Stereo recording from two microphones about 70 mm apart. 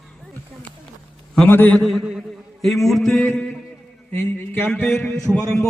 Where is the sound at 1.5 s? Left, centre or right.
Left.